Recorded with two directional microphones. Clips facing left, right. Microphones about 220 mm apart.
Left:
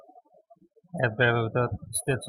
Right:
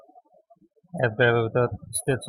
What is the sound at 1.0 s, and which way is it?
Speech, 50° right (ahead or behind).